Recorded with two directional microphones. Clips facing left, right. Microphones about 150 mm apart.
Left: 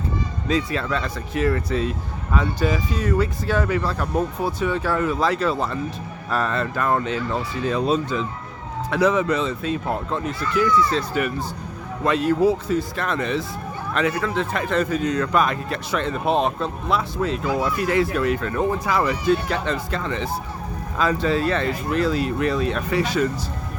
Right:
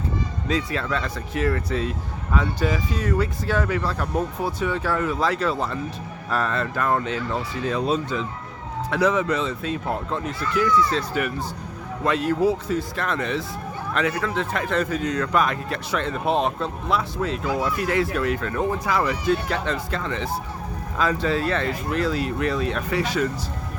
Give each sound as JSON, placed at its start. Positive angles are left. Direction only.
{"t": 0.4, "sound": "speech", "side_deg": 25}